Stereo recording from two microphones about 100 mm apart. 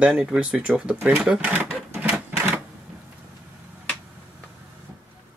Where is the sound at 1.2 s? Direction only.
15° right (ahead or behind).